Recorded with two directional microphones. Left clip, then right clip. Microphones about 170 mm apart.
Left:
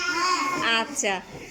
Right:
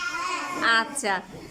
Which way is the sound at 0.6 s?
10° left (ahead or behind).